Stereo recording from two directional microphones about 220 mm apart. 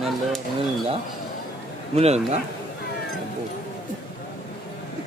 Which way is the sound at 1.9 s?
30° right (ahead or behind).